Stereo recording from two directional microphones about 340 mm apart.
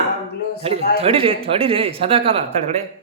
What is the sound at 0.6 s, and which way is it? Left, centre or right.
Speech, centre.